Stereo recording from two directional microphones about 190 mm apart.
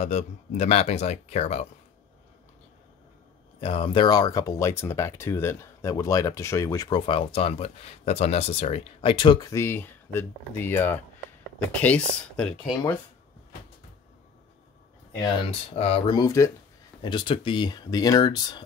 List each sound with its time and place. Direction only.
0.0 s speech: 35° left (ahead or behind)
3.6 s speech: 30° left (ahead or behind); by 12.9 s 5° left (ahead or behind)
15.8 s speech: 30° left (ahead or behind)
16.2 s speech: 15° left (ahead or behind)